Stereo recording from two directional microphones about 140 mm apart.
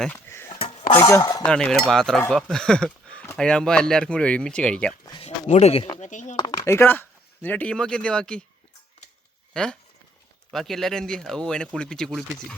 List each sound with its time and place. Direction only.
0.3 s a sound: 20° left (ahead or behind)
0.6 s dishes: 55° left (ahead or behind)
0.9 s cutlery: 25° left (ahead or behind)
1.5 s speech: 5° left (ahead or behind)
5.2 s speech: 50° left (ahead or behind)
6.0 s speech: 60° left (ahead or behind)
6.7 s speech: 15° left (ahead or behind)
9.5 s speech: 5° left (ahead or behind)